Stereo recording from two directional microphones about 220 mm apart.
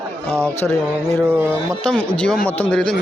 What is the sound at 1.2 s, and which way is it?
Speech, 10° right (ahead or behind).